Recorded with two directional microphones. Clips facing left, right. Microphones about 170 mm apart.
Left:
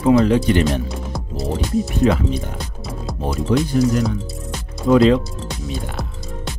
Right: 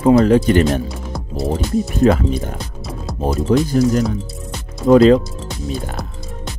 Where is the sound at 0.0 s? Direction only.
45° right (ahead or behind).